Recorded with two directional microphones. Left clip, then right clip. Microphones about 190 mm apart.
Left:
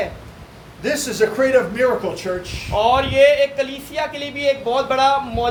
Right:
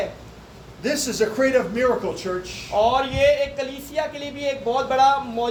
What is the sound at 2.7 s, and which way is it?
Speech, 20° left (ahead or behind).